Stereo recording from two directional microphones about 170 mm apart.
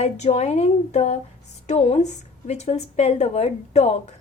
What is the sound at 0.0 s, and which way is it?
A woman's voice, 40° left (ahead or behind).